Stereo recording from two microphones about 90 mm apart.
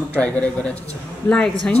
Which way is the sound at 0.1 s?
15° left (ahead or behind).